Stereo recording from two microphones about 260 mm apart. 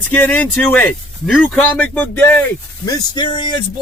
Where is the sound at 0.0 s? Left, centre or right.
Centre.